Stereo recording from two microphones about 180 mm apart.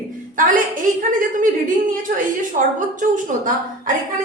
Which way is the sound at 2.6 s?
45° right (ahead or behind).